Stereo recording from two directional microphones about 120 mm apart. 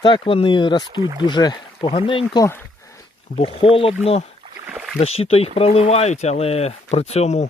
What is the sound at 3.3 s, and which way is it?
Speech, 50° left (ahead or behind).